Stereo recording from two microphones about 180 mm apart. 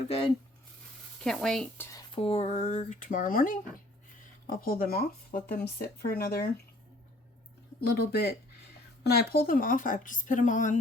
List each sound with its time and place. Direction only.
0.0 s speech: 30° left (ahead or behind)
1.2 s speech: 5° left (ahead or behind)
2.1 s speech: 30° left (ahead or behind); by 3.6 s 50° left (ahead or behind)
4.6 s speech: 55° left (ahead or behind)
7.8 s speech: 60° left (ahead or behind)
9.5 s speech: 50° left (ahead or behind)